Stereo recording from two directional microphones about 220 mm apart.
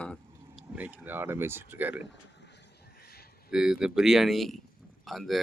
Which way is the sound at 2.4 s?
50° left (ahead or behind).